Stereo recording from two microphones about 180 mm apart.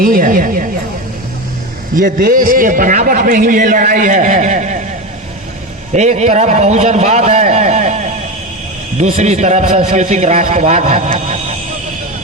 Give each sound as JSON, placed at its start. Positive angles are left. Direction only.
{"t": 0.0, "sound": "a man's voice", "side_deg": -50}
{"t": 2.0, "sound": "a man's voice", "side_deg": -50}
{"t": 5.9, "sound": "a man's voice", "side_deg": -40}
{"t": 9.0, "sound": "a man's voice", "side_deg": -35}